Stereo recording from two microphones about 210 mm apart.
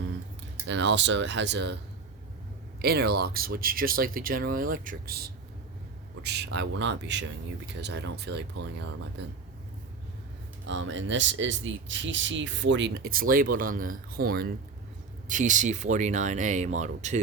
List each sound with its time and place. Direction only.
0.7 s speech: 55° right (ahead or behind)
2.8 s speech: 50° right (ahead or behind)
10.7 s speech: 60° right (ahead or behind); by 17.2 s 35° right (ahead or behind)